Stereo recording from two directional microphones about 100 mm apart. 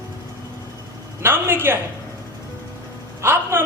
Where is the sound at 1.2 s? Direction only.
25° right (ahead or behind).